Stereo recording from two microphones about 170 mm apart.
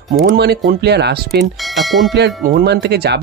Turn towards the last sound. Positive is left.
turn(degrees=-75)  # may be behind; listen again after turning